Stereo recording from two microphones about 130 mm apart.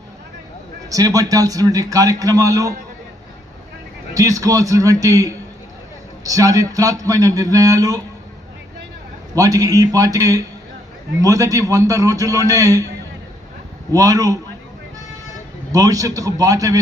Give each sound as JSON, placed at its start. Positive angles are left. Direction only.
{"t": 0.9, "sound": "a man's voice", "side_deg": -25}
{"t": 4.1, "sound": "a man's voice", "side_deg": -25}
{"t": 9.3, "sound": "a man's voice", "side_deg": -25}
{"t": 13.9, "sound": "a man's voice", "side_deg": -25}
{"t": 15.7, "sound": "a man's voice", "side_deg": -25}